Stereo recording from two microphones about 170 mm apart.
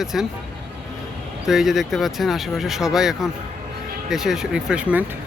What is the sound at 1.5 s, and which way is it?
Speech, centre (ahead or behind).